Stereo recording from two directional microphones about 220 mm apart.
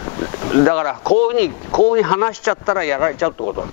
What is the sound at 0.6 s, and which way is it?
Speech, 10° left (ahead or behind).